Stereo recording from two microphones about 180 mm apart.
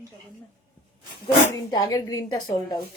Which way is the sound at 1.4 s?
20° left (ahead or behind).